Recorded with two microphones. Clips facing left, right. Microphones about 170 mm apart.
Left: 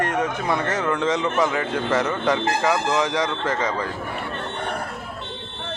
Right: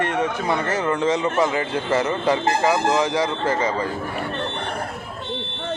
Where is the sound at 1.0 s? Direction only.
5° right (ahead or behind).